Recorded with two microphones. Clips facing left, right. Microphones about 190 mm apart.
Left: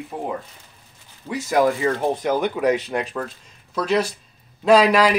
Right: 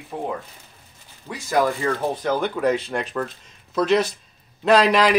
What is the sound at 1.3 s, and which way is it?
A man's voice, 15° left (ahead or behind).